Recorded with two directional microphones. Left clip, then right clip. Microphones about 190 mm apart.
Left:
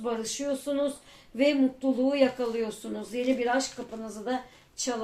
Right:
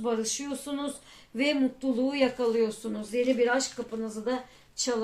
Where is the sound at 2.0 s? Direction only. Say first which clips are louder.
Left 1 dB; 35° right (ahead or behind).